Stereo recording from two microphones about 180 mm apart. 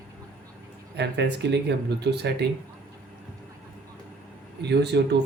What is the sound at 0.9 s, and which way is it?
Speech, 70° right (ahead or behind).